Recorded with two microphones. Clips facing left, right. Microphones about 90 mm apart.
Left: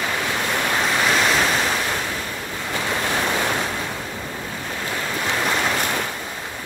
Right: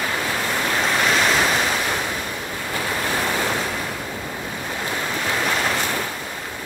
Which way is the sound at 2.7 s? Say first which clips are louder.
Left 1 dB; 20° left (ahead or behind).